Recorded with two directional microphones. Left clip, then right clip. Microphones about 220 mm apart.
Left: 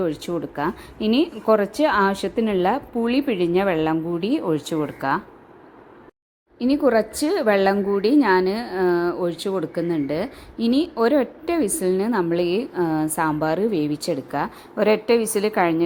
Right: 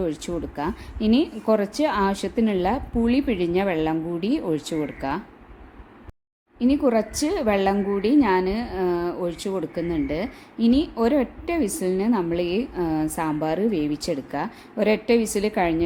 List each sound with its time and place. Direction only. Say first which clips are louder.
0.0 s a woman's voice: left 3 dB; centre (ahead or behind)
6.6 s a woman's voice: left 2 dB; centre (ahead or behind)